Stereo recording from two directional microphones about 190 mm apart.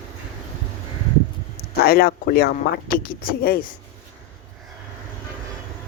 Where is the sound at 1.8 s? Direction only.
55° left (ahead or behind).